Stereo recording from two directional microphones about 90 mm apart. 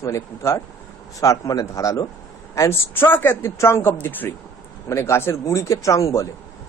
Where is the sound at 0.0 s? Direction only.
35° left (ahead or behind).